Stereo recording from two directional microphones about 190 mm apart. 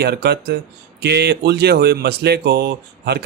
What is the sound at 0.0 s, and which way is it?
Speech, 60° right (ahead or behind).